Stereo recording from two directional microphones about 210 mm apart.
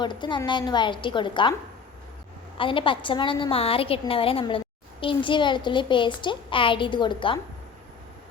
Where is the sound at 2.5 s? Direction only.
25° left (ahead or behind).